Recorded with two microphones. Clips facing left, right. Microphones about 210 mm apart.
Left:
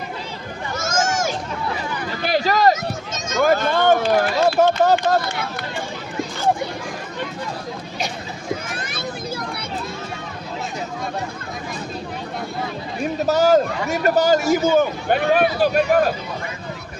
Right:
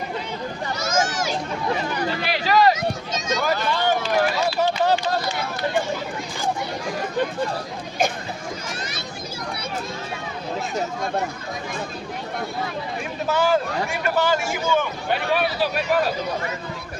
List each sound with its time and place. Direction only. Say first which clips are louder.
0.8 s a sound: left 2 dB; 50° left (ahead or behind)
2.2 s run: left 2 dB; 45° left (ahead or behind)
13.2 s a man's voice: left 5 dB; 40° left (ahead or behind)